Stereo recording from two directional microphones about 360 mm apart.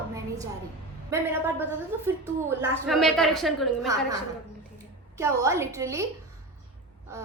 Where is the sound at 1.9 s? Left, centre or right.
Centre.